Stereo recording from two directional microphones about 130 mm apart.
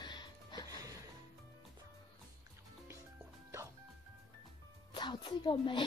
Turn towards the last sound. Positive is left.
turn(degrees=40)  # may be behind; listen again after turning